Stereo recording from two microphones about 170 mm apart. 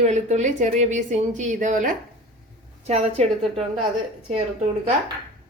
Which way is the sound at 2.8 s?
40° right (ahead or behind).